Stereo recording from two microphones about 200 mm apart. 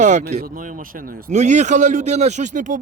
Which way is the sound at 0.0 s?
35° right (ahead or behind).